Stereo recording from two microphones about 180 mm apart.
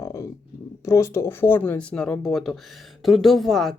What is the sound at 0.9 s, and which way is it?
Speech, 15° left (ahead or behind).